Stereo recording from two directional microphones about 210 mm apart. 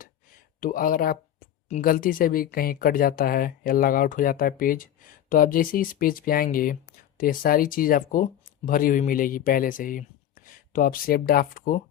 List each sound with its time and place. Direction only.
0.6 s speech: 40° left (ahead or behind)